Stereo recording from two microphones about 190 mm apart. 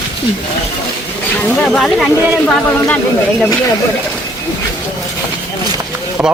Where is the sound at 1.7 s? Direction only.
Centre (ahead or behind).